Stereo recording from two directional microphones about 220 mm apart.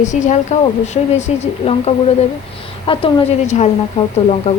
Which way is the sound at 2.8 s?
25° left (ahead or behind).